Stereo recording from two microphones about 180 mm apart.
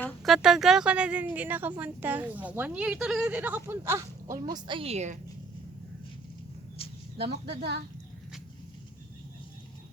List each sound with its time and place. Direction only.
0.0 s speech: 5° left (ahead or behind); by 4.0 s 15° right (ahead or behind)
4.4 s a woman's voice: 25° right (ahead or behind)
7.4 s speech: 70° right (ahead or behind)